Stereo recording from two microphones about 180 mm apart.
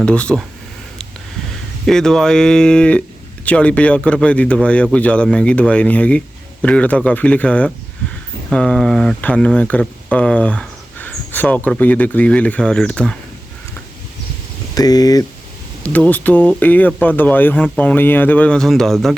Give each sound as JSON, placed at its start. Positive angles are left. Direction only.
{"t": 0.0, "sound": "speech", "side_deg": 5}
{"t": 1.9, "sound": "speech", "side_deg": 5}
{"t": 14.8, "sound": "speech", "side_deg": 20}
{"t": 15.8, "sound": "speech", "side_deg": 10}